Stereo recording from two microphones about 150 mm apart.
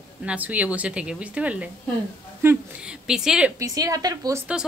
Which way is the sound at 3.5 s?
25° right (ahead or behind).